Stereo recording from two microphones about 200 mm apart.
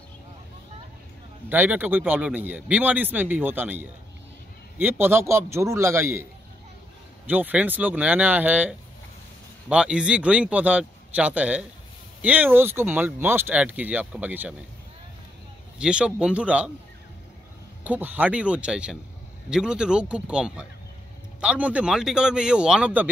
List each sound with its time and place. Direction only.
1.5 s speech: 10° right (ahead or behind)
7.2 s a man's voice: 10° right (ahead or behind)
15.8 s a man's voice: 5° right (ahead or behind)
17.8 s a man's voice: 10° right (ahead or behind)